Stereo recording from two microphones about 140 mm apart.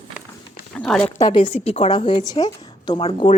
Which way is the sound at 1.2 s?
35° left (ahead or behind).